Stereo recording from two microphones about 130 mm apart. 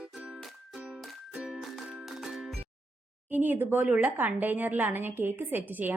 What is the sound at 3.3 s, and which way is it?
A woman's voice, 15° right (ahead or behind).